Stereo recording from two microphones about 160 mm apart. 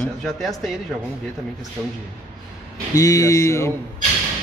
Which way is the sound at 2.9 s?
20° left (ahead or behind).